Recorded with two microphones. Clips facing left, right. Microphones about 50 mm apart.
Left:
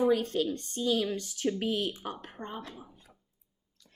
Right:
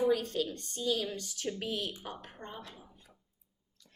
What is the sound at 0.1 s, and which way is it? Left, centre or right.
A woman's voice, left.